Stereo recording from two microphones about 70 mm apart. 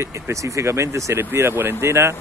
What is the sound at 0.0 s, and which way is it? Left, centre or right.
Speech, right.